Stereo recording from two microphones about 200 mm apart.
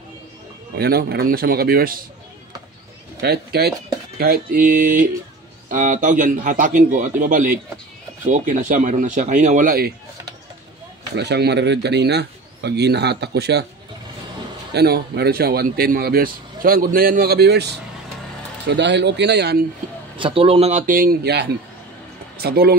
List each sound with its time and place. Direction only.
0.7 s a man's voice: 50° right (ahead or behind)
3.2 s speech: 55° right (ahead or behind)
11.1 s speech: 55° right (ahead or behind)
14.7 s a man's voice: 55° right (ahead or behind)
20.2 s a man's voice: 25° right (ahead or behind); by 22.8 s 50° right (ahead or behind)